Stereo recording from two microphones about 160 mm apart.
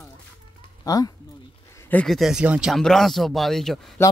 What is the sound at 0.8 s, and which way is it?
Speech, 20° left (ahead or behind).